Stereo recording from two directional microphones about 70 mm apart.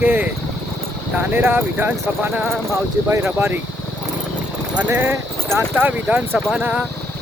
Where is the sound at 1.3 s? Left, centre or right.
Right.